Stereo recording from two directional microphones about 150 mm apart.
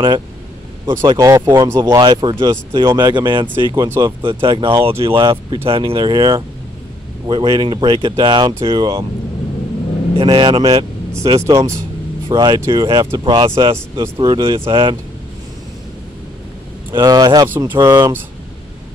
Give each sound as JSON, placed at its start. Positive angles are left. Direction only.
{"t": 1.0, "sound": "speech", "side_deg": -25}
{"t": 10.1, "sound": "speech", "side_deg": -35}
{"t": 11.3, "sound": "speech", "side_deg": -20}
{"t": 14.4, "sound": "speech", "side_deg": -20}
{"t": 14.7, "sound": "speech", "side_deg": -35}
{"t": 16.9, "sound": "speech", "side_deg": -25}